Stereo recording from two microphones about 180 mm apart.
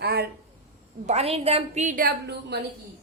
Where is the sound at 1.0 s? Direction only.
35° right (ahead or behind); by 2.6 s 60° right (ahead or behind).